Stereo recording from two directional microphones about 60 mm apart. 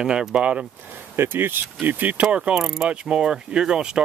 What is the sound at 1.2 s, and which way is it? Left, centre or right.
Speech, right.